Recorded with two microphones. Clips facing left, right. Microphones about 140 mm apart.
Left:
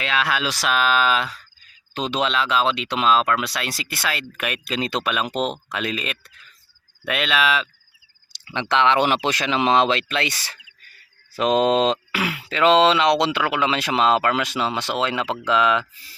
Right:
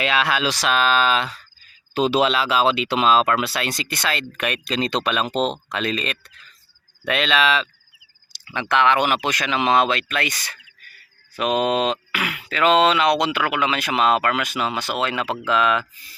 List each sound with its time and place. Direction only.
0.0 s speech: 5° right (ahead or behind)
8.3 s a sound: 25° left (ahead or behind)
8.7 s speech: 25° left (ahead or behind)